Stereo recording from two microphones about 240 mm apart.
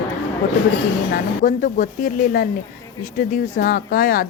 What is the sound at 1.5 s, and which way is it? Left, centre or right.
A woman's voice, left.